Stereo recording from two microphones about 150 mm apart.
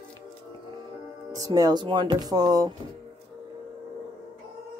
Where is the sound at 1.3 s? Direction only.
25° right (ahead or behind).